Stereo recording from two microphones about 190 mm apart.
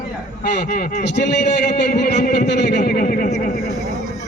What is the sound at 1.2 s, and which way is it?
A man's voice, 65° left (ahead or behind).